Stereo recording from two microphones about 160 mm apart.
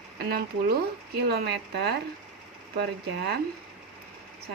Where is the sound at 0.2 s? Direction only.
80° right.